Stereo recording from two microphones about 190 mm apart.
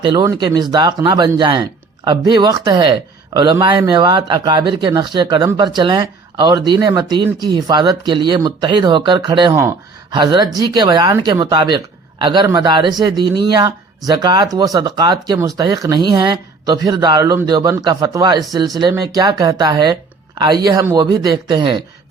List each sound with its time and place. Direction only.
0.0 s speech: 25° right (ahead or behind)